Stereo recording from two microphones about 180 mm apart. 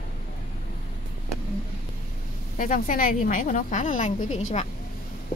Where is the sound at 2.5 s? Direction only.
50° left (ahead or behind).